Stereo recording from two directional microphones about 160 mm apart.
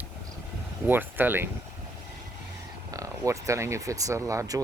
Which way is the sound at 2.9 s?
20° right (ahead or behind).